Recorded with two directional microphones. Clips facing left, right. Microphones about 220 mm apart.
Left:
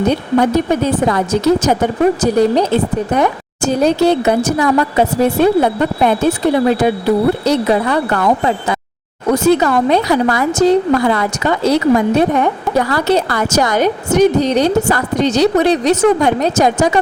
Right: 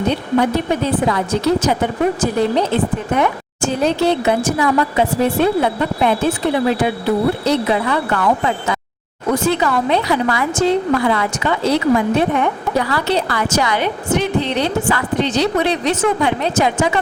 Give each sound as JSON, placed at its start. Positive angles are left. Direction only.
{"t": 0.1, "sound": "a woman's voice", "side_deg": 45}